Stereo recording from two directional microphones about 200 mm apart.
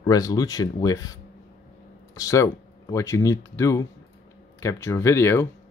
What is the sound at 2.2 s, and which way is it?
Speech, 15° left (ahead or behind).